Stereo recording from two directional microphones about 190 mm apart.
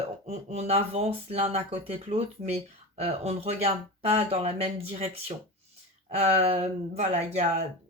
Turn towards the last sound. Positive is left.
turn(degrees=-35)  # may be behind; listen again after turning